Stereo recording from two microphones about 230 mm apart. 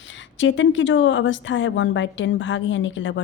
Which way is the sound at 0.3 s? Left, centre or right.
Left.